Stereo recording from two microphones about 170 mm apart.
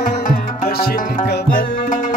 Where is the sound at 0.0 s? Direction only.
60° left (ahead or behind).